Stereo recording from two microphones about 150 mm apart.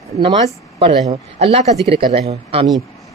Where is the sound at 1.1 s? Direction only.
40° right (ahead or behind).